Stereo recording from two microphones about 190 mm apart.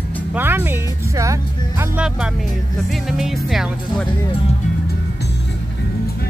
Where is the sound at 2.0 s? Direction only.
5° right (ahead or behind).